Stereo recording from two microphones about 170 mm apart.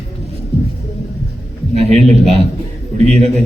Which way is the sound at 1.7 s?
40° right (ahead or behind).